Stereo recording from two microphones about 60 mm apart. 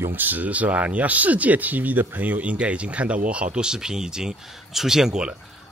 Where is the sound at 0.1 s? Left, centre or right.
Right.